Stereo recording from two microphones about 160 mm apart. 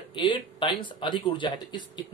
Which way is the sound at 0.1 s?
30° left (ahead or behind).